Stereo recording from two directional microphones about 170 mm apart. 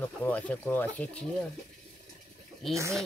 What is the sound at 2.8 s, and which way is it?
Speech, 20° right (ahead or behind).